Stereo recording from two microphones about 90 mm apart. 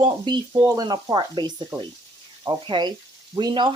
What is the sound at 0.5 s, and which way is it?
Frying, 40° right (ahead or behind).